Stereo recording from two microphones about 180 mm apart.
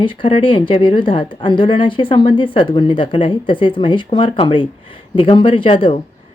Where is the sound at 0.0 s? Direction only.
30° left (ahead or behind).